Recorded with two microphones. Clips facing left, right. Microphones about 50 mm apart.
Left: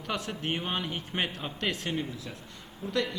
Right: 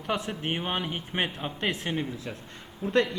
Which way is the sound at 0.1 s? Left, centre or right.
Centre.